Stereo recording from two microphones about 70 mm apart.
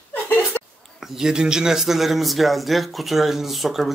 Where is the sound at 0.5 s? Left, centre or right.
Left.